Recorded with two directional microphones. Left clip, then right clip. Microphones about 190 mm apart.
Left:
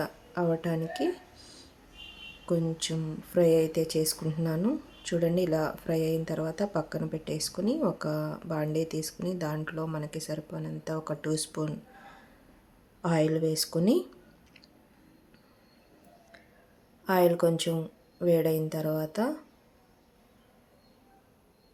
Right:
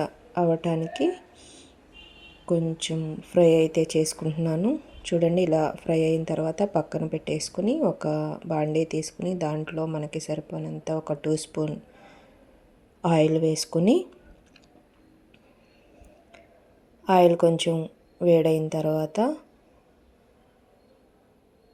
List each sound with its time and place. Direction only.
0.0 s speech: 15° right (ahead or behind)
0.9 s a sound: 15° right (ahead or behind)
2.5 s speech: 10° right (ahead or behind)
17.0 s a woman's voice: 20° right (ahead or behind)